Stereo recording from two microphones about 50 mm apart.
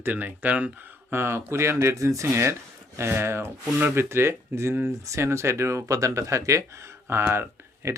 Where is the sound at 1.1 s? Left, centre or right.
Right.